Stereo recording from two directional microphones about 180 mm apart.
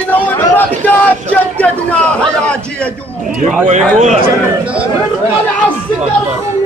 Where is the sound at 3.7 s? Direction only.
40° right (ahead or behind).